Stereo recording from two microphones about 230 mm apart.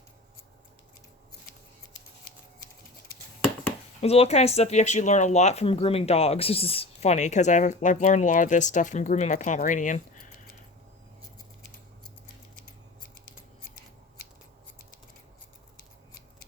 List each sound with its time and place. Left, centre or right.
4.0 s speech: left